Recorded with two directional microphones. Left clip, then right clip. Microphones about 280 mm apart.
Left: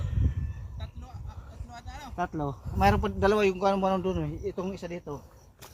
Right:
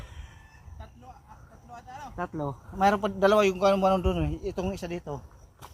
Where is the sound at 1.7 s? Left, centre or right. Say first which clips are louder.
Right 2 dB; left.